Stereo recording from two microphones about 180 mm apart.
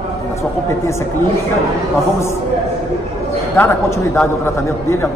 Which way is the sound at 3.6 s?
10° left (ahead or behind).